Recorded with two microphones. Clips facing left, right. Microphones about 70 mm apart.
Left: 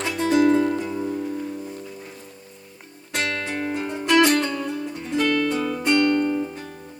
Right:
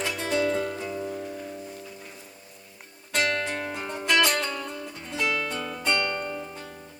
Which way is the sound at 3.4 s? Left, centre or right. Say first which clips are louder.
Left 4 dB; left.